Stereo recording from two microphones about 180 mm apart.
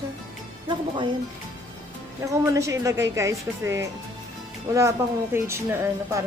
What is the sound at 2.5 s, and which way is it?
Speech, 15° right (ahead or behind).